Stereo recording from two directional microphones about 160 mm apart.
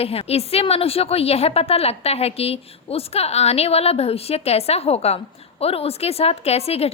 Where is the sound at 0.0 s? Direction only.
40° left (ahead or behind).